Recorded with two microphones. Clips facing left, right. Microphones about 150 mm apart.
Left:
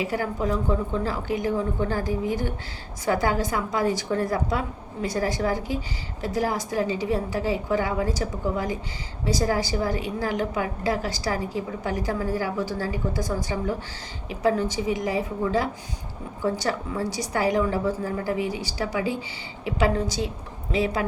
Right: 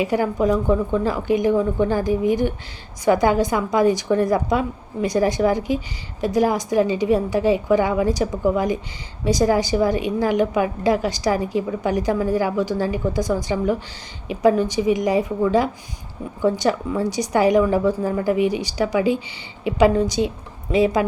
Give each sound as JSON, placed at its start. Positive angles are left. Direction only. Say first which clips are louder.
{"t": 0.0, "sound": "a woman's voice", "louder": "right 7 dB", "side_deg": -20}